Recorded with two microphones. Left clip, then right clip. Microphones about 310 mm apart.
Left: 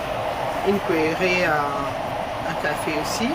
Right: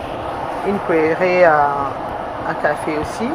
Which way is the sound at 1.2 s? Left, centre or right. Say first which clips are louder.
Right 8 dB; centre.